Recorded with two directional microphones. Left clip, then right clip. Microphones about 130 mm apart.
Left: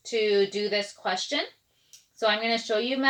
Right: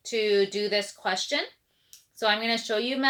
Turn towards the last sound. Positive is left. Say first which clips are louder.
# left 1 dB
turn(degrees=-30)  # may be behind; listen again after turning